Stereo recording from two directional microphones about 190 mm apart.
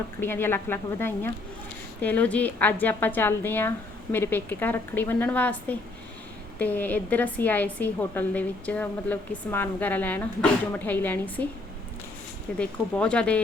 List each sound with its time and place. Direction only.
0.2 s a woman's voice: 10° left (ahead or behind)
12.5 s speech: 5° left (ahead or behind)